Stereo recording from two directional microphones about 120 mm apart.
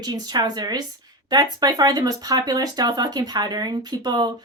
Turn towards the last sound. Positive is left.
turn(degrees=-35)  # may be behind; listen again after turning